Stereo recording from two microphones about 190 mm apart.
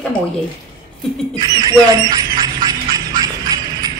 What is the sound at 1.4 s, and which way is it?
Speech, 20° right (ahead or behind).